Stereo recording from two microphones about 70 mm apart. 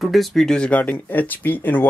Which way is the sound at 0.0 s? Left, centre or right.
Centre.